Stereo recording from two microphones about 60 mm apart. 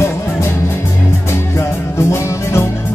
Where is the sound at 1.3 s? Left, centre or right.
Left.